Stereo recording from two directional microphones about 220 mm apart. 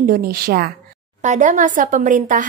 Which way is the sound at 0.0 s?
40° right (ahead or behind).